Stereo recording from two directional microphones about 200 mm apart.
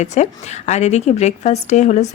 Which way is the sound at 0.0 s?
35° left (ahead or behind).